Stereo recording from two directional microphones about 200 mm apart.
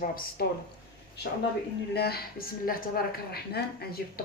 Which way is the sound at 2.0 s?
50° left (ahead or behind).